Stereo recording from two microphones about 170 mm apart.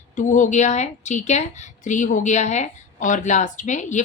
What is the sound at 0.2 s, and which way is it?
A woman's voice, 50° left (ahead or behind).